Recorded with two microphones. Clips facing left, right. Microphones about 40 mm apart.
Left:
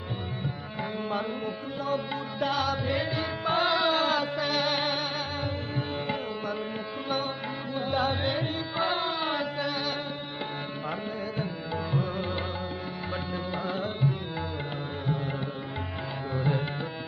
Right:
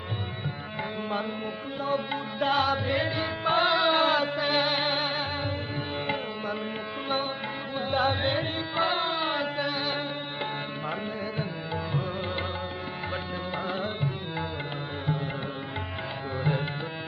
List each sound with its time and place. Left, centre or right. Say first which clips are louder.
2.4 s music: right 3 dB; right
7.8 s carnatic music: right 2 dB; centre
11.3 s music: even; centre
13.7 s tabla: left 2 dB; centre
16.4 s music: even; centre